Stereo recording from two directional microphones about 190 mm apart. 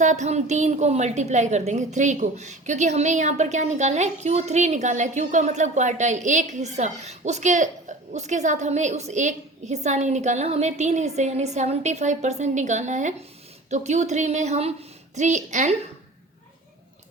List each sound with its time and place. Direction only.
0.0 s a woman's voice: 40° right (ahead or behind)